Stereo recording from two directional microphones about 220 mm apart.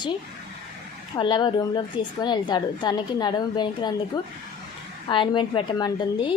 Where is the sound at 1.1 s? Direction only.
20° left (ahead or behind).